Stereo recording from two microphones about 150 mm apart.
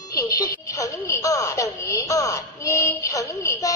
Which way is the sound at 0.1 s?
25° left (ahead or behind).